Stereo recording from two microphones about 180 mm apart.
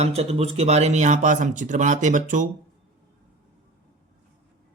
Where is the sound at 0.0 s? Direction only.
35° right (ahead or behind).